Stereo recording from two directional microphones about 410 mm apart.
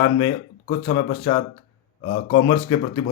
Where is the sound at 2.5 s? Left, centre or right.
Centre.